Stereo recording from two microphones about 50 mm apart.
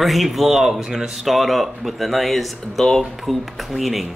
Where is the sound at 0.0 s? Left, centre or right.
Centre.